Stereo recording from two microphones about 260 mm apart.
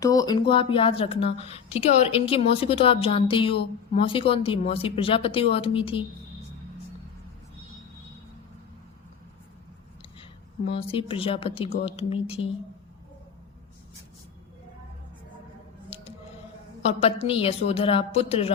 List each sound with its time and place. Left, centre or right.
0.0 s speech: centre
10.2 s a woman's voice: left
15.9 s music: left
16.8 s speech: left